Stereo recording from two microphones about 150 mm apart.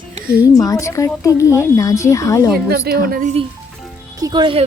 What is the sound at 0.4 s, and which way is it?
Speech, 25° left (ahead or behind).